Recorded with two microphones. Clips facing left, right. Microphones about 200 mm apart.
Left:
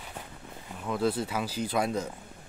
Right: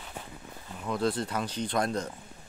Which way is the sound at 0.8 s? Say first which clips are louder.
Left 1 dB; 5° left (ahead or behind).